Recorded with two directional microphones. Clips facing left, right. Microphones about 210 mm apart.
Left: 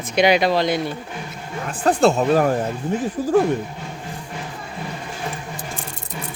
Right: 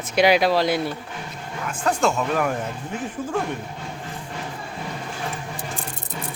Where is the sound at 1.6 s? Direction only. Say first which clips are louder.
Left 5 dB; 35° left (ahead or behind).